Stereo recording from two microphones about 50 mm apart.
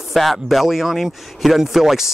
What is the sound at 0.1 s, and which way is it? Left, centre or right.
Speech, centre.